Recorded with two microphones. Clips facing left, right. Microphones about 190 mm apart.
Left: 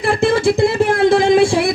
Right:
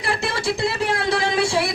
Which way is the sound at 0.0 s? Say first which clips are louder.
Left 10 dB; 50° left (ahead or behind).